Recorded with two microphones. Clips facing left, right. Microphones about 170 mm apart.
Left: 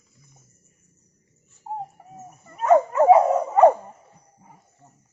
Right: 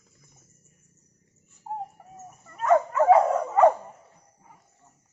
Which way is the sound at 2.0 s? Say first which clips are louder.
Left 2 dB; 10° left (ahead or behind).